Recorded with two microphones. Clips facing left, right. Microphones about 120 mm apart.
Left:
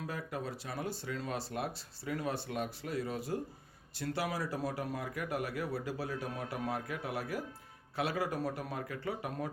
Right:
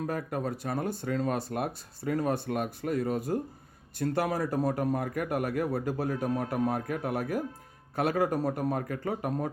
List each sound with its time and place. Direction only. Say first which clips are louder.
0.1 s speech: right 7 dB; 50° right (ahead or behind)